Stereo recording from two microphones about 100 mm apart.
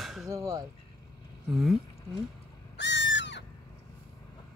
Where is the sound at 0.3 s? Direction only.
30° right (ahead or behind).